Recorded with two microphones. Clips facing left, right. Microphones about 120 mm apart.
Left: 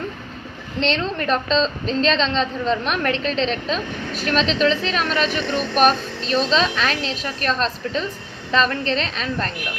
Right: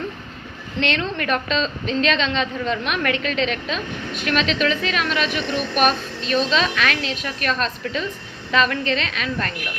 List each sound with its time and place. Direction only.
0.8 s a woman's voice: 30° left (ahead or behind)